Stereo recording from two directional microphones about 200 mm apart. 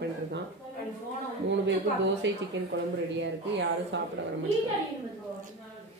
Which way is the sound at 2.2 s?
65° right (ahead or behind).